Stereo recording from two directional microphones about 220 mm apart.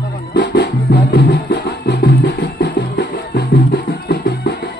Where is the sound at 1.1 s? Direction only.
50° left (ahead or behind).